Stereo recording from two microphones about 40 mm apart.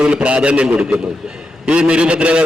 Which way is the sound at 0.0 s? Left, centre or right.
Right.